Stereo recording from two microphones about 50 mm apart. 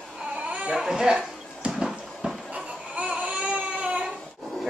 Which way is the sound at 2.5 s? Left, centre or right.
Right.